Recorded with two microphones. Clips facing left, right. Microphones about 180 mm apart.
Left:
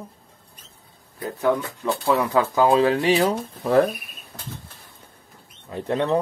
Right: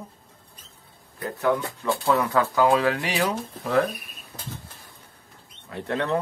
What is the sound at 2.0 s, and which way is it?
Speech, 20° left (ahead or behind).